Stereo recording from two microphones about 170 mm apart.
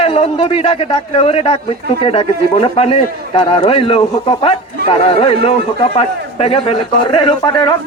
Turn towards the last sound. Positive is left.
turn(degrees=30)  # may be behind; listen again after turning